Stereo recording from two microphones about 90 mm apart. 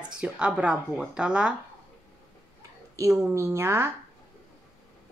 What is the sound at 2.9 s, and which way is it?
Speech, 35° right (ahead or behind).